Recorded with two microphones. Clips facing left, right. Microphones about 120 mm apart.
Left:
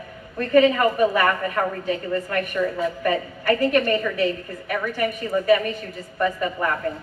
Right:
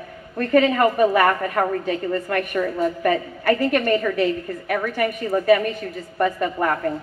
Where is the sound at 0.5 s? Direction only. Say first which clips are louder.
Even; 50° right (ahead or behind).